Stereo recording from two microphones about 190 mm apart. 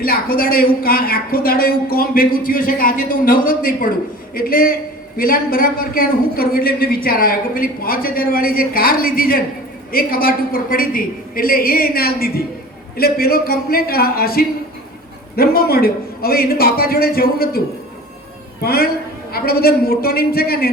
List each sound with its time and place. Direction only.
0.0 s a woman's voice: 50° left (ahead or behind)
18.6 s a woman's voice: 55° left (ahead or behind)